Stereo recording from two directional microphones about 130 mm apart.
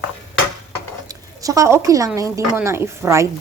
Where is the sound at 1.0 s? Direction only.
25° right (ahead or behind).